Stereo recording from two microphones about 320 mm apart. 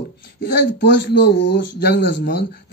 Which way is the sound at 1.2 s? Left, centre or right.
Left.